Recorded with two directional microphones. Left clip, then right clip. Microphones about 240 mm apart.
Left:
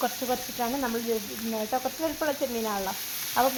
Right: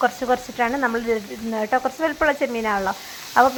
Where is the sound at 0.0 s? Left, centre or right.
Right.